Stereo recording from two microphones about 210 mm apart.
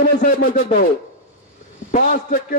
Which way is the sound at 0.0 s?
45° left (ahead or behind).